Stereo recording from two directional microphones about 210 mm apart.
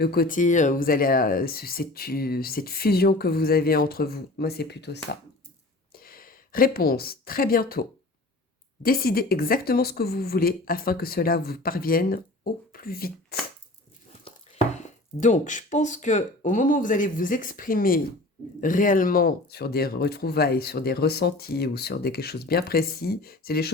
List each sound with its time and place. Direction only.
0.0 s a woman's voice: 45° left (ahead or behind)
14.3 s speech: 30° left (ahead or behind)